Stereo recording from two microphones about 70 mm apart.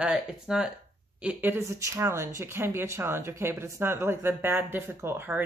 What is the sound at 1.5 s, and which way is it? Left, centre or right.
Speech, right.